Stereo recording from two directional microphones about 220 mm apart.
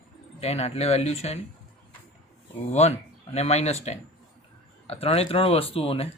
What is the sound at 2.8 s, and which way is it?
Speech, 30° left (ahead or behind).